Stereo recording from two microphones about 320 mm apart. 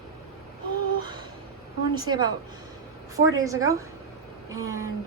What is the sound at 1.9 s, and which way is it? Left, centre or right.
A woman's voice, centre.